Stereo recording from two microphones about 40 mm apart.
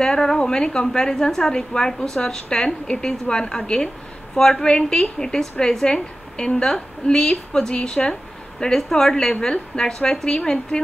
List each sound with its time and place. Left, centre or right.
0.0 s a woman's voice: centre
8.7 s a woman's voice: centre